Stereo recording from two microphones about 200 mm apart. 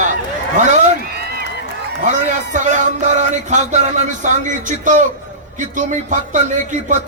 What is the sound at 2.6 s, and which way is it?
A man's voice, 35° right (ahead or behind).